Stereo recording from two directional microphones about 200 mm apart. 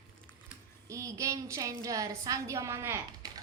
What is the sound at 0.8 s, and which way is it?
A woman's voice, 15° right (ahead or behind).